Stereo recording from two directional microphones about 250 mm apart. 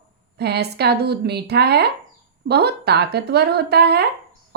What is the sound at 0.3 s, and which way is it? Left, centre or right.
Speech, right.